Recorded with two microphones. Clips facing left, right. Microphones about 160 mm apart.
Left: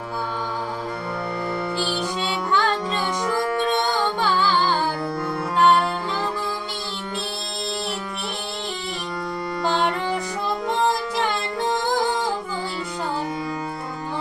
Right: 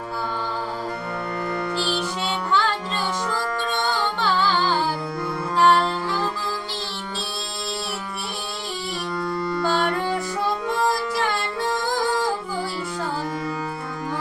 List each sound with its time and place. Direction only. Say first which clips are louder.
1.8 s music: even; 15° left (ahead or behind)
3.2 s music: left 4 dB; 15° left (ahead or behind)
9.6 s music: left 2 dB; 15° left (ahead or behind)